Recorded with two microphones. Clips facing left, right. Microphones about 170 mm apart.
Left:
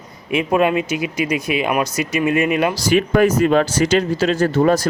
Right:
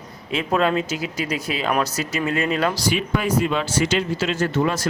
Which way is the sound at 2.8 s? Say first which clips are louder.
Left 8 dB; 50° left (ahead or behind).